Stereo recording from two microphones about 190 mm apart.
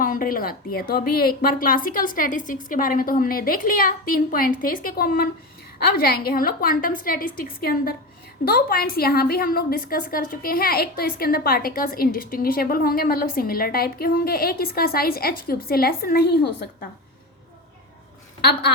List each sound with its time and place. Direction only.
0.0 s a woman's voice: 45° left (ahead or behind)